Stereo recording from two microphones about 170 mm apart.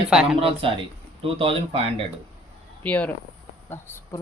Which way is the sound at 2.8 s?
10° left (ahead or behind).